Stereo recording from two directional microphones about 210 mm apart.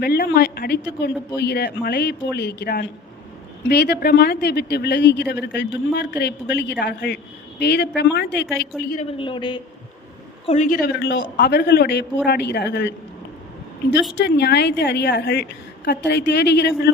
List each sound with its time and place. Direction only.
0.0 s a woman's voice: 50° left (ahead or behind)
8.9 s speech: 30° left (ahead or behind)
10.4 s a woman's voice: 35° left (ahead or behind); by 12.9 s 50° left (ahead or behind)
14.3 s a woman's voice: 55° left (ahead or behind)